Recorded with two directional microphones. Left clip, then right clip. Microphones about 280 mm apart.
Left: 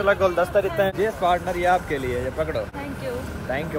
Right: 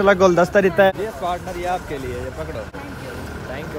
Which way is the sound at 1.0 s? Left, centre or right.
Centre.